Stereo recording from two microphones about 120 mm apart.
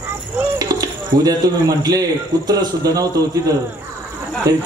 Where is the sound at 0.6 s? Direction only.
35° right (ahead or behind).